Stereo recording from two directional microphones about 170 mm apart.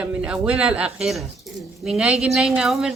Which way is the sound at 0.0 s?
5° right (ahead or behind).